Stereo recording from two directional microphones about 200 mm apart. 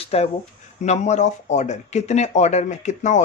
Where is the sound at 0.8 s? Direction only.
35° left (ahead or behind).